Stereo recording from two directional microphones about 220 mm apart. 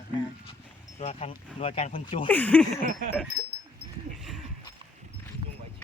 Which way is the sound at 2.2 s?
5° left (ahead or behind).